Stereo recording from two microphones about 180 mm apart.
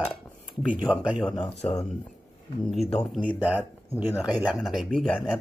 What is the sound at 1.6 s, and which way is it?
Speech, 35° left (ahead or behind).